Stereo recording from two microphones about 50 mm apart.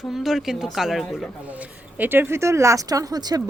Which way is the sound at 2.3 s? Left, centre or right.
Right.